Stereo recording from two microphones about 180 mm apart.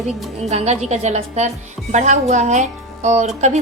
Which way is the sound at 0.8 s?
40° right (ahead or behind).